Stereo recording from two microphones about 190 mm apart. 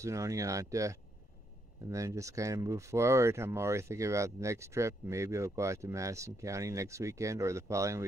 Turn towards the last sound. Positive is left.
turn(degrees=-15)  # may be behind; listen again after turning